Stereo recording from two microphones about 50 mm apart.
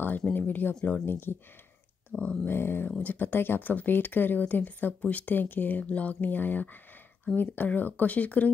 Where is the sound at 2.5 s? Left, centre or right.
Left.